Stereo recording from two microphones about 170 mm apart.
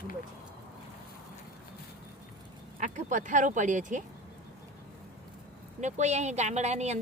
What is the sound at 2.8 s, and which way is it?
Speech, 45° right (ahead or behind).